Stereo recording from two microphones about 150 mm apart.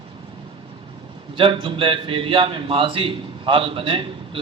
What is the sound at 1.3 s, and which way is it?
A man's voice, 35° right (ahead or behind).